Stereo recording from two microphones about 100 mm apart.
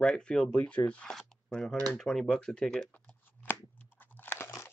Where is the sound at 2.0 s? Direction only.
5° left (ahead or behind).